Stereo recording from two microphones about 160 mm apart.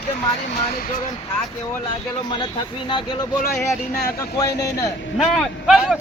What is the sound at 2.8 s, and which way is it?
Speech, 30° left (ahead or behind).